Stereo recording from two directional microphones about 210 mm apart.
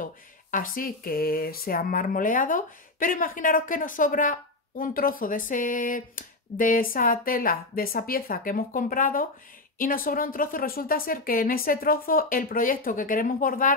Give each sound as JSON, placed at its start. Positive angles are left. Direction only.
{"t": 0.0, "sound": "speech", "side_deg": 40}